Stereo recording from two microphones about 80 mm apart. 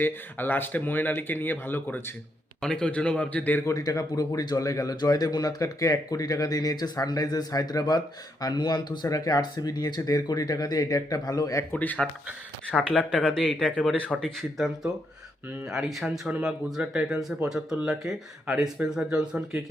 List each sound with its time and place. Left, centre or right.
0.0 s speech: left
2.6 s speech: centre
3.7 s speech: left
11.7 s speech: centre